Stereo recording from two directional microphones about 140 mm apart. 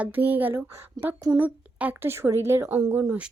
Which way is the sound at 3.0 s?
5° right (ahead or behind).